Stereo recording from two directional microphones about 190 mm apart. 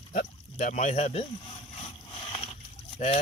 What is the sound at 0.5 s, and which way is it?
Speech, 40° left (ahead or behind).